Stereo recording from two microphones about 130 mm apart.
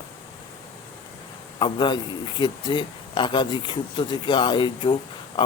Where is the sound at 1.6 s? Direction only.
35° left (ahead or behind).